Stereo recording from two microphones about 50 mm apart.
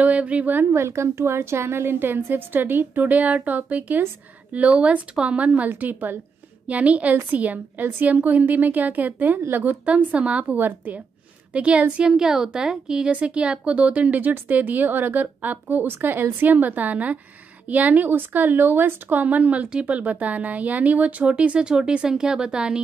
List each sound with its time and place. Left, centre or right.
0.0 s speech: right
0.7 s a woman's voice: right
15.9 s a woman's voice: right
19.7 s speech: right